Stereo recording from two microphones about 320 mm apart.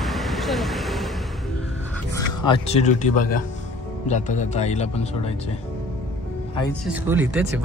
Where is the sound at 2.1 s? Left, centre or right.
Centre.